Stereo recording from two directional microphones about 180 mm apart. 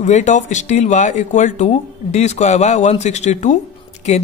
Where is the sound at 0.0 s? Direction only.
40° left (ahead or behind).